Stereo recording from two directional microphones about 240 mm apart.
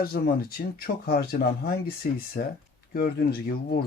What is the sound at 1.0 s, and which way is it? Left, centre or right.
Speech, left.